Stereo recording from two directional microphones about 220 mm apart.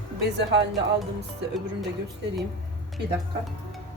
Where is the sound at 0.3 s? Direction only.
50° right (ahead or behind).